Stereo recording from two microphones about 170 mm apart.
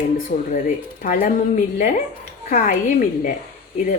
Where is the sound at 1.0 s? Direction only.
55° left (ahead or behind).